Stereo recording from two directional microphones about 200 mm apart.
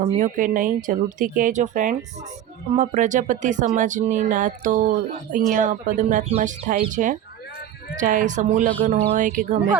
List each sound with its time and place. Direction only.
0.0 s speech: 40° right (ahead or behind)